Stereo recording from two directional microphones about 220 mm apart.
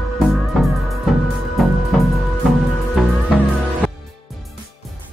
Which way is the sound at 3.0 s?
5° left (ahead or behind).